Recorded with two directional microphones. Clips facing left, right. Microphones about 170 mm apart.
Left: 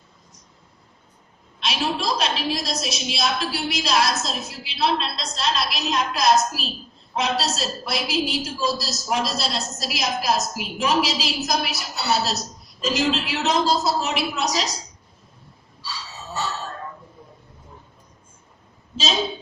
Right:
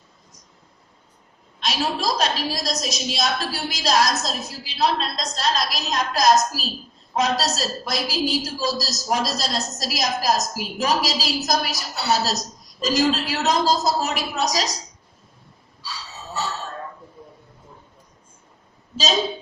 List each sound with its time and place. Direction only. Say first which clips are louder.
1.6 s a woman's voice: right 1 dB; 40° right (ahead or behind)